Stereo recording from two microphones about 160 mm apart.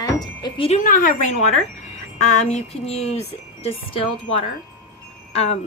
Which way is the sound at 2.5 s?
40° left (ahead or behind).